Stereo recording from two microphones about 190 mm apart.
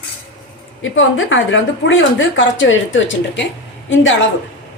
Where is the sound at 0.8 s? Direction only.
90° left.